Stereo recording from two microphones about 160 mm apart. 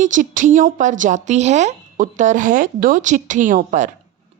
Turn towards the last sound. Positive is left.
turn(degrees=-50)  # may be behind; listen again after turning